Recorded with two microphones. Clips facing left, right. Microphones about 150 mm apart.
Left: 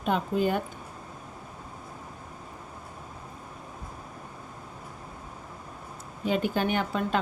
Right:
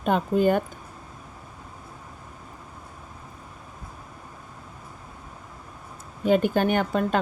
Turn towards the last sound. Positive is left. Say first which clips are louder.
# right 4 dB
turn(degrees=-50)  # may be behind; listen again after turning